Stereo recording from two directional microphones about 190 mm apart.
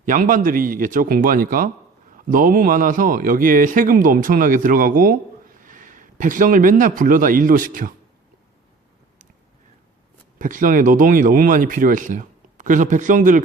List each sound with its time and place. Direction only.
0.0 s a man's voice: 45° right (ahead or behind)
10.3 s a man's voice: 45° right (ahead or behind)